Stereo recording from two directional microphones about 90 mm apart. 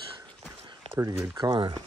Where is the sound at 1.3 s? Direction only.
50° right (ahead or behind).